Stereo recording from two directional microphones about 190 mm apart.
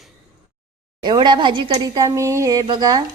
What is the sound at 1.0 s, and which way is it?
Speech, 25° right (ahead or behind).